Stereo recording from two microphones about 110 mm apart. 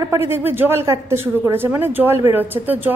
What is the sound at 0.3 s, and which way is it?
A woman's voice, 20° right (ahead or behind).